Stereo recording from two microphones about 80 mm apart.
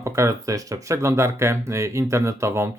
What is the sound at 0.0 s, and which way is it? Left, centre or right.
Speech, right.